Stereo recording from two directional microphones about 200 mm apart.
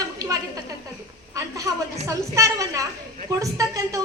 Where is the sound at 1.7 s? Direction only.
15° right (ahead or behind).